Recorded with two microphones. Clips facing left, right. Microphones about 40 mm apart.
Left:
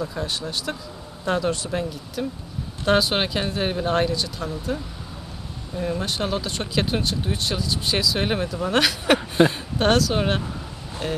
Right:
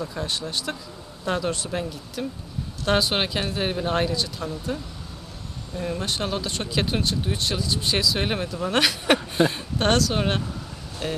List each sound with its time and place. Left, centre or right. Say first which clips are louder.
0.0 s speech: left 1 dB; centre
5.8 s speech: left 2 dB; centre